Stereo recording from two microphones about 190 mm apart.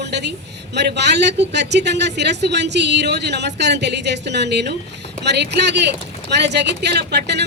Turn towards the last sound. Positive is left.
turn(degrees=-60)  # may be behind; listen again after turning